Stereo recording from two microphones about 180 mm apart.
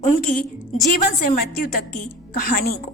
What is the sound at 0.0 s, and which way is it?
A woman's voice, 50° left (ahead or behind).